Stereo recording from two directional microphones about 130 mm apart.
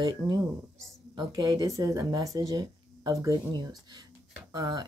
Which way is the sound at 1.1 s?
30° right (ahead or behind).